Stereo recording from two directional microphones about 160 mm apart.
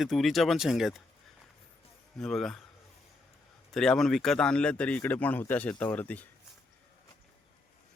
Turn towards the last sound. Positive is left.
turn(degrees=10)  # may be behind; listen again after turning